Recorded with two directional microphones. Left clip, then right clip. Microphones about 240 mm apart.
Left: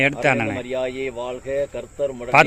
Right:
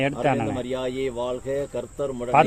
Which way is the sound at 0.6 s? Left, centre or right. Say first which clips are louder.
Left 2 dB; right.